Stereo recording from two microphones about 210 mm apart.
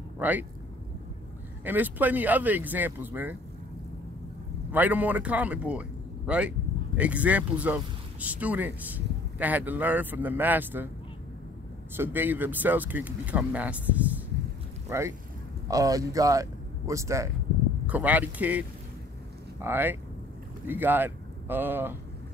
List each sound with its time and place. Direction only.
0.2 s speech: 10° right (ahead or behind)
1.6 s speech: 10° right (ahead or behind)
4.7 s speech: 10° right (ahead or behind)
12.0 s speech: 10° right (ahead or behind)